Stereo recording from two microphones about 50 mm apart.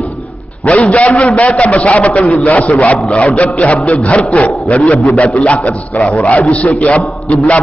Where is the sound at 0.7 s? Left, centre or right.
Left.